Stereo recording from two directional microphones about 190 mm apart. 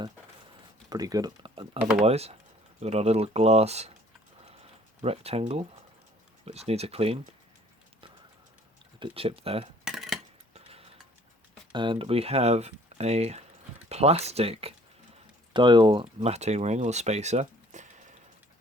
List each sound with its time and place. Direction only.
0.9 s speech: 20° right (ahead or behind)
5.0 s speech: 30° right (ahead or behind)
9.0 s speech: 30° right (ahead or behind)
9.8 s cutlery: centre (ahead or behind)
10.5 s tick-tock: 30° right (ahead or behind)
11.7 s speech: 25° right (ahead or behind)